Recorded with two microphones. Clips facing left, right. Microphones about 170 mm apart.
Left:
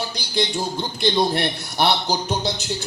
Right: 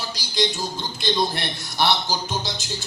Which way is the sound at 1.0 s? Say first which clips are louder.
Left 4 dB; 60° left (ahead or behind).